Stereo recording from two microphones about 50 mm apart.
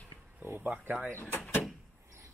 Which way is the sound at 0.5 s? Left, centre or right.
Right.